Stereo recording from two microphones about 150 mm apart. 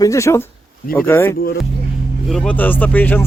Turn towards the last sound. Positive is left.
turn(degrees=15)  # may be behind; listen again after turning